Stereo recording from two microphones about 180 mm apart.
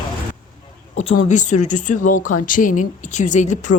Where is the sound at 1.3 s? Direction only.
40° left (ahead or behind).